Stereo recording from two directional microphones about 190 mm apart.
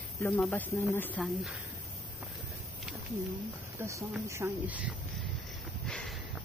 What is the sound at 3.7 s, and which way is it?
Speech, 15° right (ahead or behind).